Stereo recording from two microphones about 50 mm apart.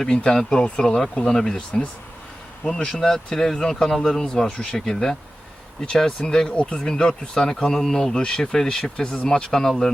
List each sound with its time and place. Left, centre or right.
0.3 s speech: centre